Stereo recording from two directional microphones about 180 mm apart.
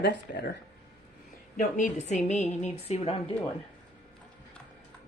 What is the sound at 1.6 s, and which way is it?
A woman's voice, 45° left (ahead or behind).